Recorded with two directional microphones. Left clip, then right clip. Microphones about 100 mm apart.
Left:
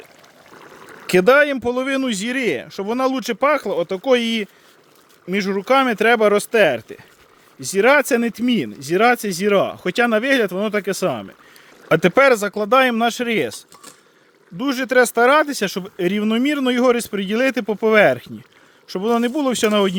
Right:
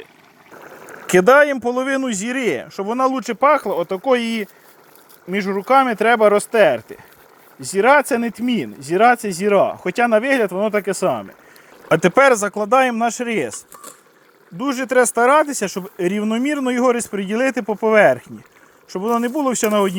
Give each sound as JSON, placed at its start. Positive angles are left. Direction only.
{"t": 0.9, "sound": "a sound", "side_deg": 20}
{"t": 1.2, "sound": "speech", "side_deg": 30}
{"t": 5.3, "sound": "speech", "side_deg": 45}
{"t": 11.9, "sound": "speech", "side_deg": 25}
{"t": 14.6, "sound": "speech", "side_deg": 40}
{"t": 16.2, "sound": "speech", "side_deg": 55}
{"t": 16.7, "sound": "speech", "side_deg": 40}
{"t": 17.7, "sound": "speech", "side_deg": 45}
{"t": 19.3, "sound": "speech", "side_deg": 35}
{"t": 19.7, "sound": "speech", "side_deg": 55}